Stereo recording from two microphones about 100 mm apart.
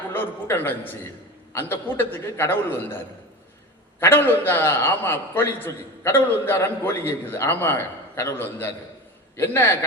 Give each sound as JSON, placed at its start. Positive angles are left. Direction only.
{"t": 0.1, "sound": "a man's voice", "side_deg": 20}
{"t": 4.0, "sound": "a man's voice", "side_deg": 20}